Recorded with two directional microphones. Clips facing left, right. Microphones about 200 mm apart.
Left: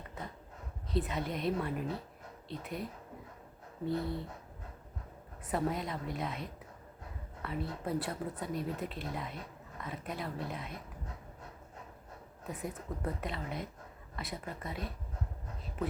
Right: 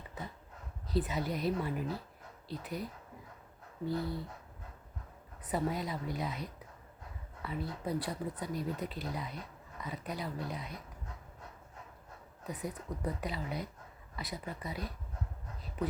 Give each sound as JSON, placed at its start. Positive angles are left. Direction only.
{"t": 0.9, "sound": "speech", "side_deg": 0}
{"t": 5.5, "sound": "speech", "side_deg": 0}
{"t": 12.5, "sound": "speech", "side_deg": 0}